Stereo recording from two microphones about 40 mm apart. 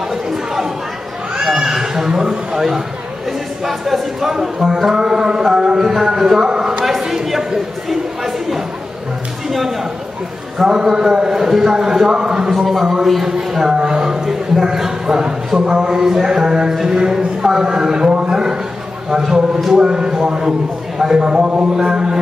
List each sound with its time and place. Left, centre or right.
0.1 s chatter: centre
1.3 s speech: centre
3.6 s a man's voice: centre
4.9 s a man's voice: centre
7.2 s chatter: centre
9.5 s speech: centre
10.7 s a man's voice: centre
12.4 s a man's voice: centre
13.7 s a man's voice: right
18.2 s a sound: centre
19.0 s a man's voice: centre; by 21.6 s right
21.7 s a man's voice: centre